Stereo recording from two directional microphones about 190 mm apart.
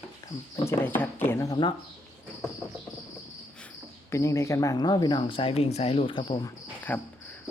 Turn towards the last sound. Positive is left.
turn(degrees=10)  # may be behind; listen again after turning